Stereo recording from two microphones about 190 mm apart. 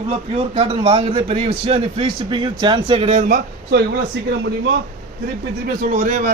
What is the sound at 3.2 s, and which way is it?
Speech, 55° right (ahead or behind).